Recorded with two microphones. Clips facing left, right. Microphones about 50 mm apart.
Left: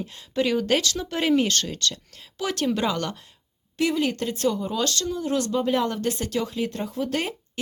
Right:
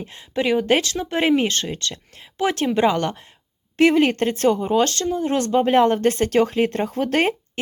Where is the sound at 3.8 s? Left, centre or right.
Right.